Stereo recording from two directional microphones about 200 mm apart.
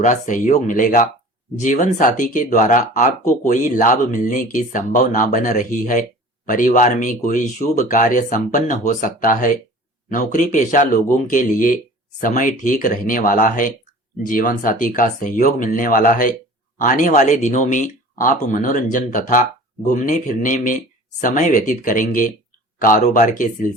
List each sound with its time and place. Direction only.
0.0 s speech: 40° left (ahead or behind)